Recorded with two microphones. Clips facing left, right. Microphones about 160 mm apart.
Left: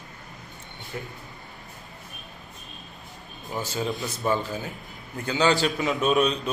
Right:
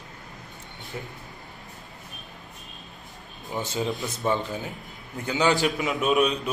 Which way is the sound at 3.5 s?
20° right (ahead or behind).